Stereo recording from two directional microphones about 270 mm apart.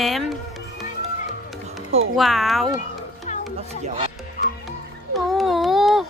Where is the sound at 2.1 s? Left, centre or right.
Centre.